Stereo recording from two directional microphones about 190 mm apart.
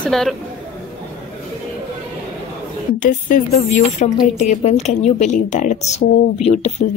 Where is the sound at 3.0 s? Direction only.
40° left (ahead or behind).